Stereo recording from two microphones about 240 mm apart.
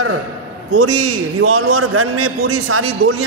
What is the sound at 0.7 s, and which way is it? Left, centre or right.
A man's voice, right.